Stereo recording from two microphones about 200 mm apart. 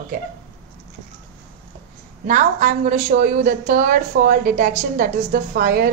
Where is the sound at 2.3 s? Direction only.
40° right (ahead or behind).